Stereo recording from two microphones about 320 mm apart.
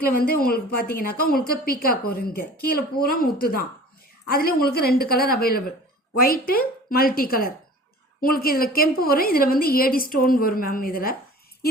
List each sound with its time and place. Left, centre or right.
0.0 s a woman's voice: left